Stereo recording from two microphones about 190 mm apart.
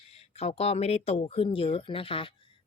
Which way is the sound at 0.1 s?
30° left (ahead or behind).